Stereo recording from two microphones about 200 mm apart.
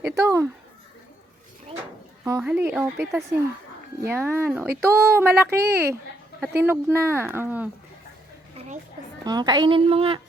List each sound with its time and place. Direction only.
0.0 s speech: 15° right (ahead or behind)
2.4 s speech: 10° right (ahead or behind)
8.5 s a sound: 35° right (ahead or behind)
9.2 s a woman's voice: 20° right (ahead or behind)